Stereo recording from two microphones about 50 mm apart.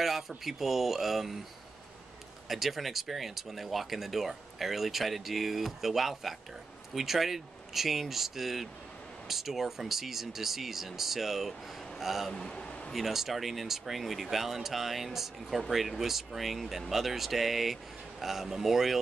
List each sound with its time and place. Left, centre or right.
0.4 s speech: centre
2.4 s speech: centre
12.3 s a sound: centre
12.9 s speech: centre